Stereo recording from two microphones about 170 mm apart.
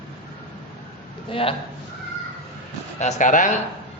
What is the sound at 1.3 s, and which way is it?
Speech, 30° left (ahead or behind).